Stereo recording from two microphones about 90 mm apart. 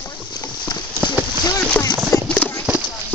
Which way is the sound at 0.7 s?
50° left (ahead or behind).